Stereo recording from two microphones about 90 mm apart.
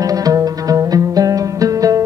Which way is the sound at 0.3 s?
45° right (ahead or behind).